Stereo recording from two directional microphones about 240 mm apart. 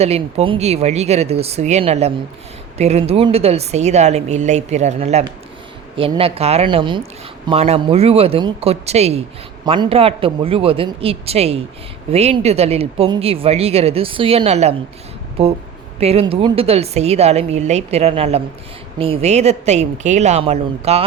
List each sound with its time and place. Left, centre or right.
0.0 s speech: right
16.0 s speech: right